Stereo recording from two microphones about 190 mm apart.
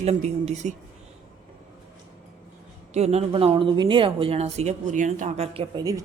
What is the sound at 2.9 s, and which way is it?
Speech, 35° right (ahead or behind).